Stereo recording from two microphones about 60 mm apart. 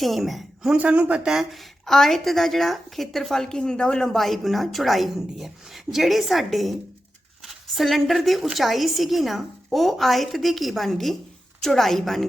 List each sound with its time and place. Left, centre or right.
0.0 s a woman's voice: centre
0.8 s speech: right
1.2 s speech: centre
1.8 s a woman's voice: centre